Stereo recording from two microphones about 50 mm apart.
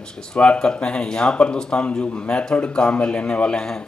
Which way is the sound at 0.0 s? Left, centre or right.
Centre.